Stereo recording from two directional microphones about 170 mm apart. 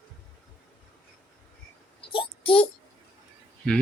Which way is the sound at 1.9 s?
30° left (ahead or behind).